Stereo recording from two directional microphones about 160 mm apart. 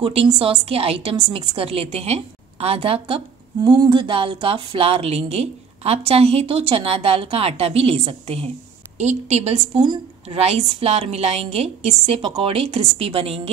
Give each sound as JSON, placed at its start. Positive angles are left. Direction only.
{"t": 0.0, "sound": "a woman's voice", "side_deg": -35}
{"t": 3.6, "sound": "a woman's voice", "side_deg": -25}